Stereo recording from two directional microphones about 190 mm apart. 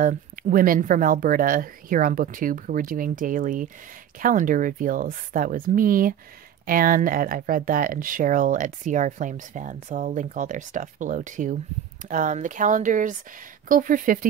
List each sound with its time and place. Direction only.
0.0 s speech: 45° right (ahead or behind)